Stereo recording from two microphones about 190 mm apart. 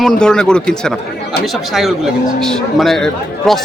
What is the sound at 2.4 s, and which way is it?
Speech, centre (ahead or behind).